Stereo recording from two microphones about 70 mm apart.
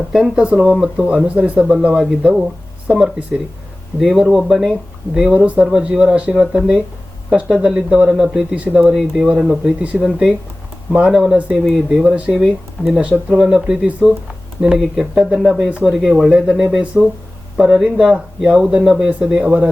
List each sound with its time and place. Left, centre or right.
0.1 s speech: centre
0.9 s speech: centre
4.0 s speech: centre
11.6 s speech: centre
12.9 s speech: centre
14.0 s speech: centre